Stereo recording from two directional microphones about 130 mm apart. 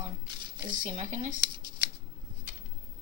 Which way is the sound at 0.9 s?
65° right (ahead or behind).